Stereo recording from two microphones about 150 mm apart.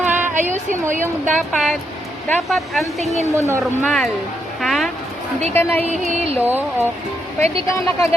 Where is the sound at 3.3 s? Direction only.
20° right (ahead or behind).